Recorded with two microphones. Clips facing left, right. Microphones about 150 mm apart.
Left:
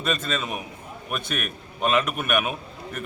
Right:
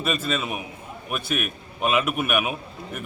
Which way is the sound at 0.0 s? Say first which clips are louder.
Right 1 dB; 5° right (ahead or behind).